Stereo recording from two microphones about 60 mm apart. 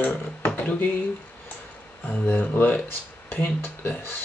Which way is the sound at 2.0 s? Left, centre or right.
Left.